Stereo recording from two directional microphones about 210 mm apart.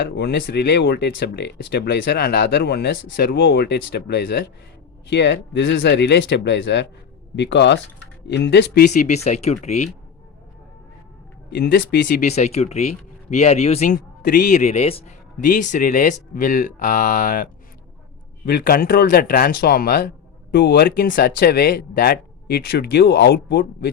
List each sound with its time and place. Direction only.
0.0 s speech: 50° left (ahead or behind)
8.9 s a man's voice: 35° left (ahead or behind)
11.5 s speech: 50° left (ahead or behind)
12.2 s a man's voice: 30° left (ahead or behind); by 23.9 s 50° left (ahead or behind)